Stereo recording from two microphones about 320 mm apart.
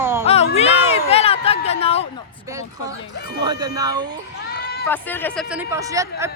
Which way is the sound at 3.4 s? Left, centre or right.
Centre.